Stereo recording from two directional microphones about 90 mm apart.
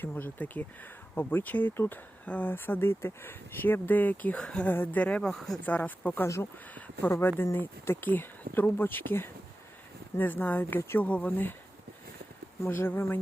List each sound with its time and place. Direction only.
0.0 s speech: 20° left (ahead or behind); by 5.5 s 5° left (ahead or behind)
5.6 s speech: 15° left (ahead or behind)
6.2 s speech: 35° left (ahead or behind)
6.7 s speech: 20° left (ahead or behind)
12.6 s speech: 25° left (ahead or behind)